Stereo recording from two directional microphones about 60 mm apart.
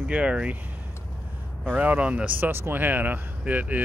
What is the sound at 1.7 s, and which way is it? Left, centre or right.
Speech, right.